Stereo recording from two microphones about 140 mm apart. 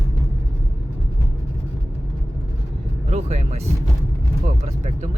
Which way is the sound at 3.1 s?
55° right (ahead or behind).